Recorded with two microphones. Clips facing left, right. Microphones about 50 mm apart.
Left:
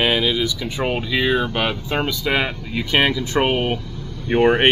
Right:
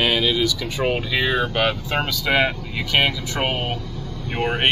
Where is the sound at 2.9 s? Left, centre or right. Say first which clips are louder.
Left 2 dB; left.